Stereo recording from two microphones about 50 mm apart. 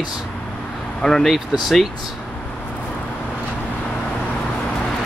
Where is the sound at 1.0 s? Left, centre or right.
Centre.